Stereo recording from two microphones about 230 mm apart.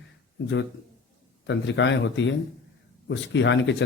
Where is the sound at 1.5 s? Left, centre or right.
Left.